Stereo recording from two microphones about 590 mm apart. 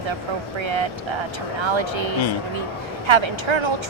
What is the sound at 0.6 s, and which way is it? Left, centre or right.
Speech, right.